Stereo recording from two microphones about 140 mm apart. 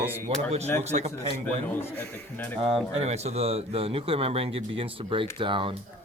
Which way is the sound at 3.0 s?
50° right (ahead or behind).